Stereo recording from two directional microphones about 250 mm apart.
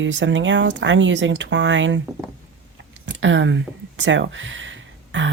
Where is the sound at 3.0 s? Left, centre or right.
Right.